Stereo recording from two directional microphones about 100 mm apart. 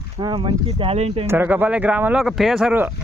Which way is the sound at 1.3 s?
20° right (ahead or behind).